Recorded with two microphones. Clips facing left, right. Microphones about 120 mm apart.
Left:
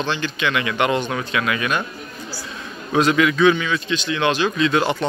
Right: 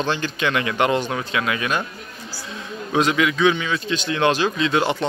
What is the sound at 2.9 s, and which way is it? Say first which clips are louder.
Speech: left 2 dB; 15° right (ahead or behind).